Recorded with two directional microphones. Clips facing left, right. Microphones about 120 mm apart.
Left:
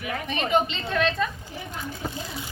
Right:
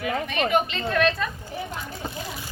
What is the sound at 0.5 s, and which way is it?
Speech, 20° left (ahead or behind).